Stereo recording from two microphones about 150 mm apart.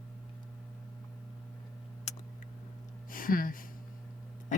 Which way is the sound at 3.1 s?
70° left (ahead or behind).